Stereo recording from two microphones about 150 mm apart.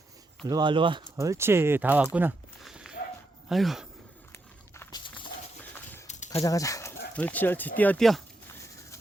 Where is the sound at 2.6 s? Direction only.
5° right (ahead or behind).